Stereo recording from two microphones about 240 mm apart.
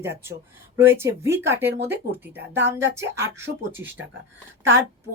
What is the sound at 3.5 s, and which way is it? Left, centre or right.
Speech, right.